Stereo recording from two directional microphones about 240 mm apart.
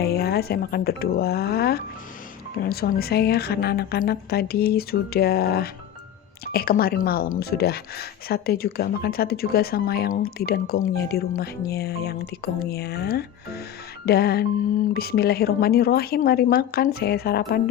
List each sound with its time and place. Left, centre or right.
0.0 s a woman's voice: left